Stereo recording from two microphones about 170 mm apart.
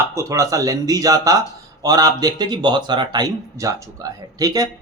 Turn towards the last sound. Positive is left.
turn(degrees=-20)  # may be behind; listen again after turning